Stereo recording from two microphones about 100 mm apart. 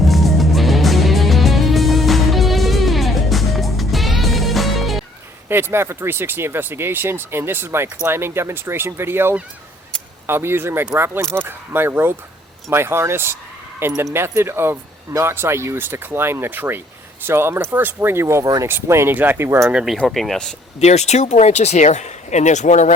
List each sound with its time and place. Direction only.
0.0 s music: centre (ahead or behind)
5.5 s speech: 25° right (ahead or behind)
18.4 s speech: 40° right (ahead or behind)
18.7 s speech: 25° right (ahead or behind)
19.7 s speech: 5° right (ahead or behind)
20.7 s speech: 90° left